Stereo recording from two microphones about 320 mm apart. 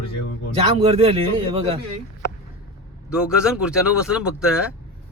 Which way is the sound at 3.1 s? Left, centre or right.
Centre.